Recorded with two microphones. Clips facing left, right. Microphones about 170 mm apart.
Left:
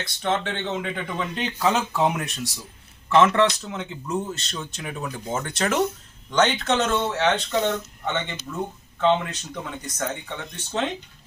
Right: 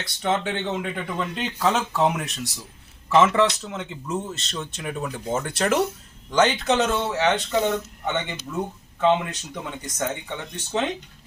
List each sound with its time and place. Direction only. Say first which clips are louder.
0.2 s speech: right 1 dB; 5° right (ahead or behind)